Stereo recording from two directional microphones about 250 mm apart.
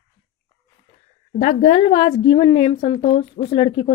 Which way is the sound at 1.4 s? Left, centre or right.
Left.